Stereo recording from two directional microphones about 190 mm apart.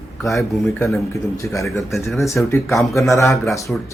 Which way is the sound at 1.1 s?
15° left (ahead or behind).